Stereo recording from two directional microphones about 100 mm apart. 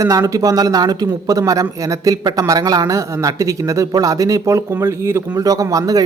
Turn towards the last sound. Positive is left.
turn(degrees=-35)  # may be behind; listen again after turning